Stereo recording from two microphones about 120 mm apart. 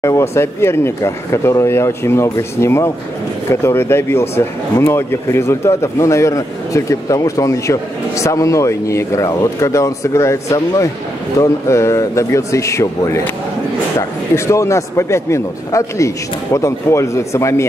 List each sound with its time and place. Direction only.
0.0 s speech: 20° left (ahead or behind)
14.3 s speech: 25° left (ahead or behind)